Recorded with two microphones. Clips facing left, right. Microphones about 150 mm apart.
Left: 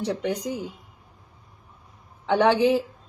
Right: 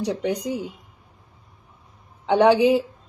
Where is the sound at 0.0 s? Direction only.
15° right (ahead or behind).